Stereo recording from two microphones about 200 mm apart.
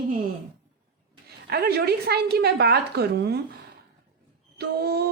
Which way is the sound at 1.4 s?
55° right (ahead or behind).